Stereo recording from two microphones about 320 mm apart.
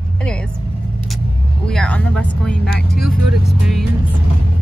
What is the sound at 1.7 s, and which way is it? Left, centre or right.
Speech, centre.